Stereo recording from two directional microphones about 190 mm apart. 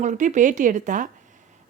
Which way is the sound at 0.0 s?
40° right (ahead or behind).